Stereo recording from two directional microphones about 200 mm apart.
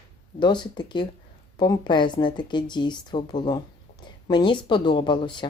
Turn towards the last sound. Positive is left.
turn(degrees=25)  # may be behind; listen again after turning